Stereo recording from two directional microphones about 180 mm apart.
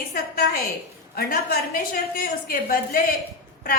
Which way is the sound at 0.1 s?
55° left (ahead or behind).